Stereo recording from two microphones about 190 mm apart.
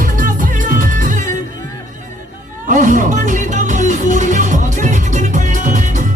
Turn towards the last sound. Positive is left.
turn(degrees=-40)  # may be behind; listen again after turning